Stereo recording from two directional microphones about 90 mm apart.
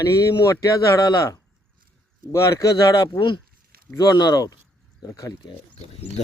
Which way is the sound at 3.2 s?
65° left (ahead or behind).